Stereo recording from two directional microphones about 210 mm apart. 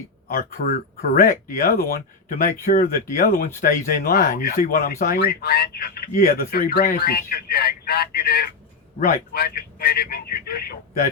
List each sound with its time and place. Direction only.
0.3 s speech: 40° left (ahead or behind)